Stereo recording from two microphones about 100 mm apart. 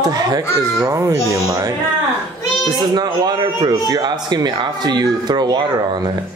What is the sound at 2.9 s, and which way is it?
A man's voice, 40° right (ahead or behind).